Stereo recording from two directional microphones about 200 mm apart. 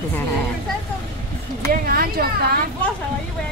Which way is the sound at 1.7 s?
50° right (ahead or behind).